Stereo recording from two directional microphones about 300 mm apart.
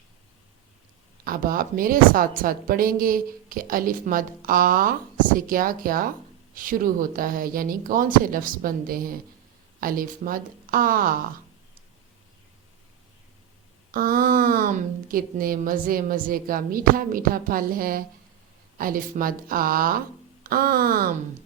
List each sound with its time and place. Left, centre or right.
1.2 s a woman's voice: right
13.9 s a woman's voice: right